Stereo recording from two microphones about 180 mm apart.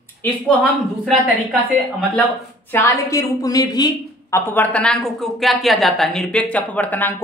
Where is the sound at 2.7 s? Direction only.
15° left (ahead or behind).